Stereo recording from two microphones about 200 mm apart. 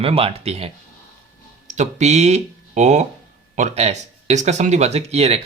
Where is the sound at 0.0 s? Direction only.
30° right (ahead or behind).